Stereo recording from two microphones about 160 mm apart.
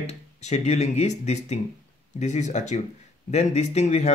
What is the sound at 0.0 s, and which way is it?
Speech, 45° left (ahead or behind).